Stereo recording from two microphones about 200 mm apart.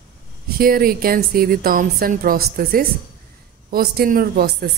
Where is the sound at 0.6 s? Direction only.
45° right (ahead or behind).